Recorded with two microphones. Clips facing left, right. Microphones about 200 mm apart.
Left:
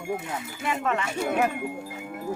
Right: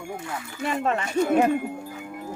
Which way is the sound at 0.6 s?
35° right (ahead or behind).